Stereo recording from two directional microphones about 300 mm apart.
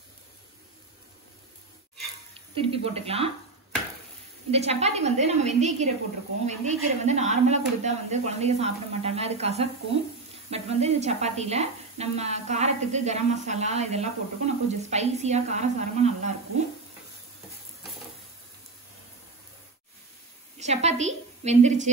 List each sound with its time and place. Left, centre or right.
2.3 s speech: centre
4.5 s speech: right
20.5 s a woman's voice: right